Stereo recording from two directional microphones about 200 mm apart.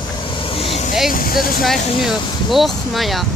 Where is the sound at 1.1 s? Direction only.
45° left (ahead or behind).